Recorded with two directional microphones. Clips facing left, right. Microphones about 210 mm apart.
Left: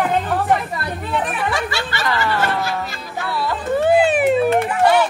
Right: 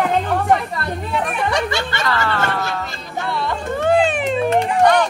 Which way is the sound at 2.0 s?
15° left (ahead or behind).